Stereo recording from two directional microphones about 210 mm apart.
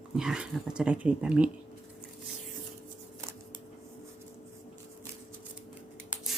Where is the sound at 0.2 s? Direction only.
5° right (ahead or behind).